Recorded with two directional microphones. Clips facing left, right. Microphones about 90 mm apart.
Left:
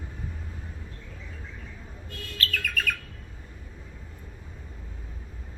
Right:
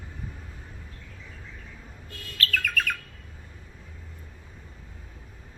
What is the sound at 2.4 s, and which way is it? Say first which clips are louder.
Bird: right 3 dB; 50° right (ahead or behind).